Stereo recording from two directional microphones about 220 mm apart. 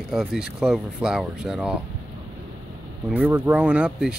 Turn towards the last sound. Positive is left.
turn(degrees=-5)  # may be behind; listen again after turning